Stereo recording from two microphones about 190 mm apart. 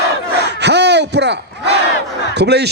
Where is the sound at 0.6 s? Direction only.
65° right (ahead or behind).